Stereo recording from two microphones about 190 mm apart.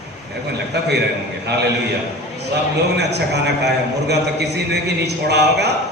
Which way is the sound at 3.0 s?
60° right (ahead or behind).